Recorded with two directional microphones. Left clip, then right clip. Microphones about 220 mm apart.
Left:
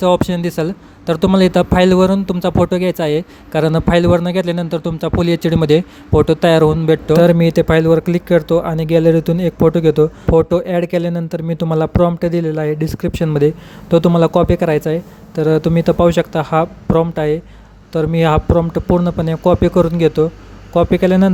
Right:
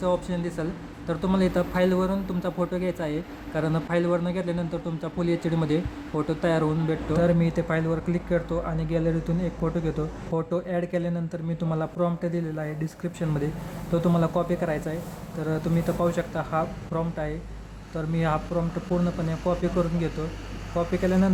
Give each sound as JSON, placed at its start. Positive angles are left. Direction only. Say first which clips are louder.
{"t": 0.0, "sound": "speech", "louder": "left 12 dB", "side_deg": 35}